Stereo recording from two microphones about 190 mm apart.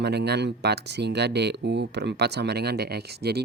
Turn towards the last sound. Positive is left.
turn(degrees=-60)  # may be behind; listen again after turning